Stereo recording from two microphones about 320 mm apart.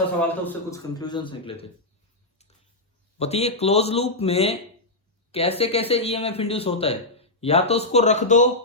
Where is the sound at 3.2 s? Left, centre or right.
Centre.